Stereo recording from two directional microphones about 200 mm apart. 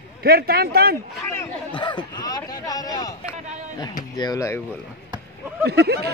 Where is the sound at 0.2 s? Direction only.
50° right (ahead or behind).